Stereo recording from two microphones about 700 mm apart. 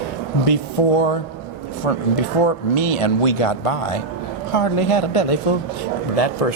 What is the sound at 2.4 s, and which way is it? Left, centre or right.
A man's voice, left.